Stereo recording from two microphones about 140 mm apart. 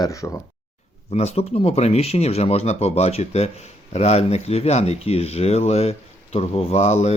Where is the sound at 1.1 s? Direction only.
45° left (ahead or behind).